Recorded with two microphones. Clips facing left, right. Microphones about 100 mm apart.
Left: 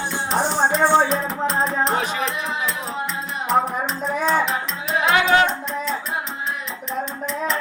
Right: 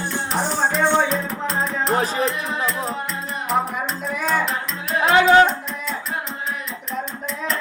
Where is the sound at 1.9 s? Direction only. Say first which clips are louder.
Right 2 dB; 35° right (ahead or behind).